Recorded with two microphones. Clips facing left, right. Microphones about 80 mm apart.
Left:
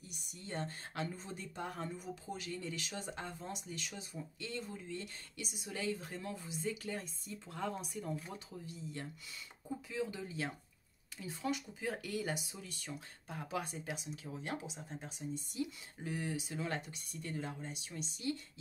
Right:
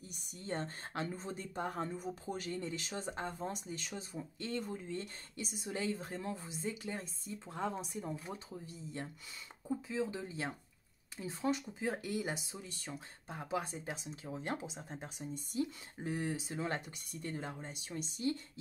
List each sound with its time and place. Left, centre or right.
0.1 s speech: right
12.4 s speech: right
16.8 s speech: right